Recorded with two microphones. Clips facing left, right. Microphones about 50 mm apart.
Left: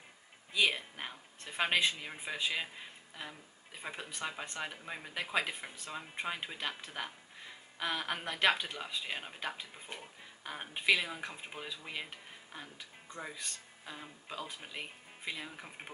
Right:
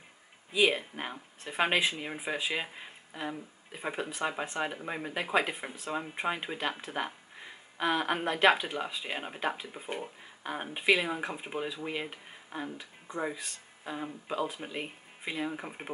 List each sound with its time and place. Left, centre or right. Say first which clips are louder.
0.5 s speech: right 5 dB; centre
12.4 s music: right 11 dB; right
13.1 s speech: right 10 dB; centre
13.8 s speech: right 10 dB; centre